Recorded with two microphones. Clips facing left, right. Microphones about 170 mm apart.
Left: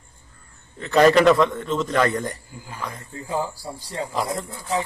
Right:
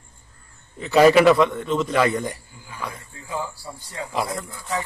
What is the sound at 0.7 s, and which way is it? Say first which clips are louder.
A man's voice: right 1 dB; 5° right (ahead or behind).